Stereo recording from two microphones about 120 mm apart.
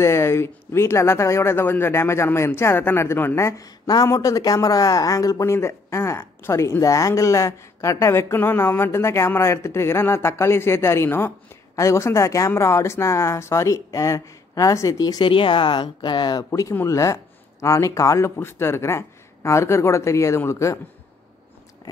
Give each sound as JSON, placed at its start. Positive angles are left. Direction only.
{"t": 0.0, "sound": "speech", "side_deg": 20}
{"t": 16.4, "sound": "speech", "side_deg": 25}